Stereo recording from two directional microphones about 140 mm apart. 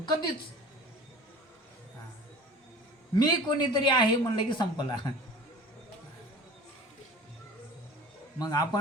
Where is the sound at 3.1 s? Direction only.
30° left (ahead or behind).